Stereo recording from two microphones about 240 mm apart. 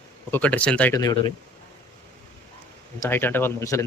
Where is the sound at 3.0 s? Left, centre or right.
Centre.